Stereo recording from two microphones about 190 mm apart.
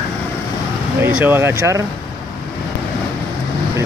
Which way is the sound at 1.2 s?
10° right (ahead or behind).